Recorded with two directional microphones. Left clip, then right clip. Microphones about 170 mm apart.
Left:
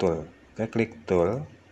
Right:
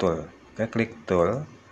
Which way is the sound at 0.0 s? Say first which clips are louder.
Right 1 dB; 20° left (ahead or behind).